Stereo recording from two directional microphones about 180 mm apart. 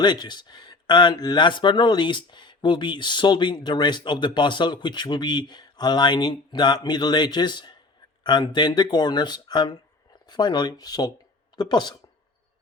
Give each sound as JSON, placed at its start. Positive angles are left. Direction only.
{"t": 0.0, "sound": "speech", "side_deg": 25}